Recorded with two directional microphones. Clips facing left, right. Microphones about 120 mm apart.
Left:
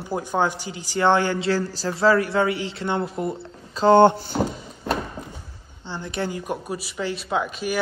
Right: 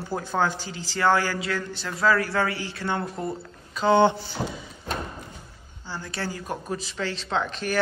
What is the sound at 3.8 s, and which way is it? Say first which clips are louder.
Speech: left 5 dB; 45° left (ahead or behind).